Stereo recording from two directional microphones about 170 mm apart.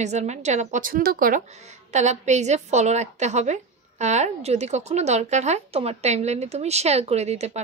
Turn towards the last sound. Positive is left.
turn(degrees=-40)  # may be behind; listen again after turning